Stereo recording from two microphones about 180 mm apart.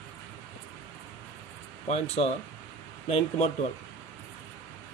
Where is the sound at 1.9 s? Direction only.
35° left (ahead or behind).